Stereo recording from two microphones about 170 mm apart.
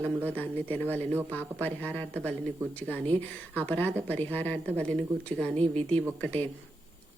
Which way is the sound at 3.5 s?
10° left (ahead or behind).